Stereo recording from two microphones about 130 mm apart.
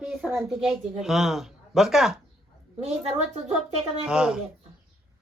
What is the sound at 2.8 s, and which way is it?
A woman's voice, 55° right (ahead or behind).